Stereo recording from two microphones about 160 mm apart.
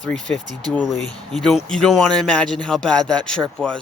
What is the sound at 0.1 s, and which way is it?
Speech, 5° left (ahead or behind).